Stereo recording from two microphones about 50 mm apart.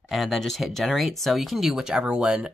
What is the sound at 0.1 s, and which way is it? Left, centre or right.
Speech, centre.